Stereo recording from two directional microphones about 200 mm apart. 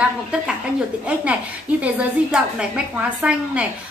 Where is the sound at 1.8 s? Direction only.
5° right (ahead or behind).